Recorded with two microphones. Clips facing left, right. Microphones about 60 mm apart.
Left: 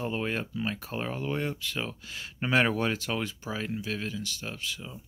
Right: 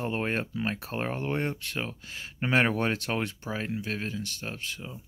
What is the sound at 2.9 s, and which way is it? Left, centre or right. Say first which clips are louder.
Speech: right 1 dB; right.